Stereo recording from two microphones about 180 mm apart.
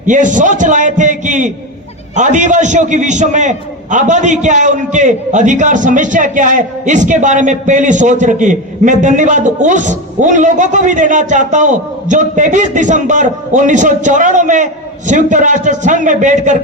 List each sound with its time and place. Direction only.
0.0 s a man's voice: 45° right (ahead or behind)